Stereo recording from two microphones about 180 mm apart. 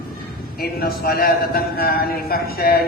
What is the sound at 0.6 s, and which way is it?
A man's voice, 60° left (ahead or behind).